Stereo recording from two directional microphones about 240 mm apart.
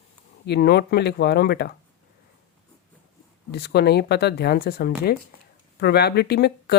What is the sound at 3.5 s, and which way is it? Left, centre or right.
Speech, left.